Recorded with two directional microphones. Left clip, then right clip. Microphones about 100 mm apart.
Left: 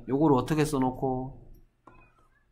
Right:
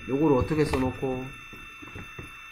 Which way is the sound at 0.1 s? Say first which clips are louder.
Right 1 dB; 15° left (ahead or behind).